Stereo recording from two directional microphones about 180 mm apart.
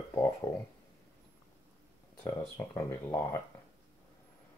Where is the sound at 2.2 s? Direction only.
15° left (ahead or behind).